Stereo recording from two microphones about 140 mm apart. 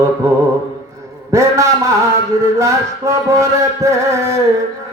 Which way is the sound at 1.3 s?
20° right (ahead or behind).